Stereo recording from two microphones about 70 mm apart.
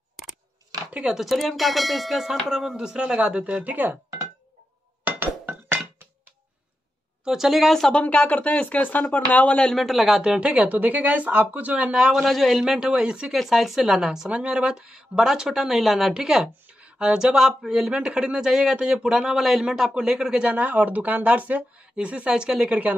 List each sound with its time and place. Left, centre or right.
0.1 s a sound: centre
0.9 s ding: centre
3.4 s speech: right
5.0 s chink: right
7.2 s ding: centre
8.0 s speech: left
9.6 s speech: centre
13.4 s ding: centre
14.3 s speech: centre